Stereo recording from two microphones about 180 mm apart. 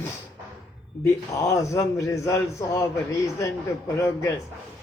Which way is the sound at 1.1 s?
20° left (ahead or behind).